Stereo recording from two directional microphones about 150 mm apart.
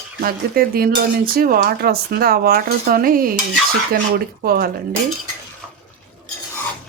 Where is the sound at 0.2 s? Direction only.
85° right.